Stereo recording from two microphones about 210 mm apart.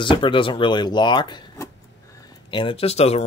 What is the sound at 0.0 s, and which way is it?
Speech, 25° left (ahead or behind).